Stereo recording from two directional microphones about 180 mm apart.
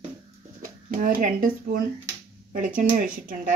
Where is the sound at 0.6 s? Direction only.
50° right (ahead or behind).